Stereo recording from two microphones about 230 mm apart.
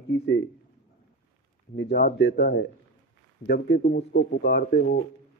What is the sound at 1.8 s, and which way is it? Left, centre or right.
A man's voice, left.